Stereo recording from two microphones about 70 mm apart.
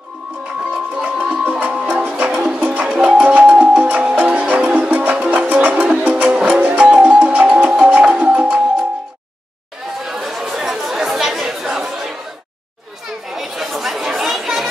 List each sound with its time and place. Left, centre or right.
0.9 s music: centre
10.0 s chatter: centre
13.3 s chatter: centre